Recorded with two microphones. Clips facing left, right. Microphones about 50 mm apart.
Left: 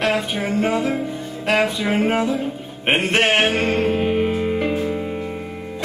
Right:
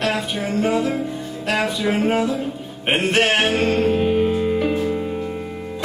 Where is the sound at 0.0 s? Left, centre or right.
Centre.